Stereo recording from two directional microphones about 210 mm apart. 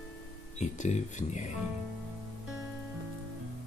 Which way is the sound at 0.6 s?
35° left (ahead or behind).